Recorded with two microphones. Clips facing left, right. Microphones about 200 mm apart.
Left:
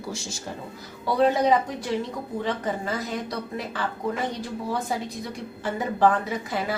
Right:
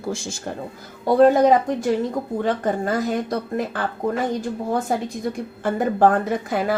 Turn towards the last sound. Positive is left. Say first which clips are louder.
# right 6 dB
turn(degrees=-55)  # may be behind; listen again after turning